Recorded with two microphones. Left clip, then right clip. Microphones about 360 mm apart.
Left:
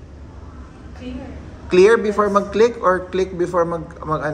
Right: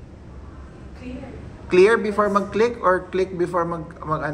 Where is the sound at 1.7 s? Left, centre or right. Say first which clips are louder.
Left 3 dB; centre.